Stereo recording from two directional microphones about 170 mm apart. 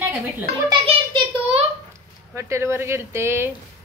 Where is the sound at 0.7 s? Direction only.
30° right (ahead or behind).